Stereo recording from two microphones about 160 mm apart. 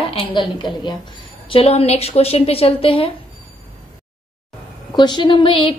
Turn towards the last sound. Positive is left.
turn(degrees=30)  # may be behind; listen again after turning